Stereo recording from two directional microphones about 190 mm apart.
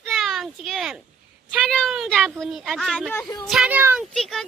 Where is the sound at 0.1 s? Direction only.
Centre (ahead or behind).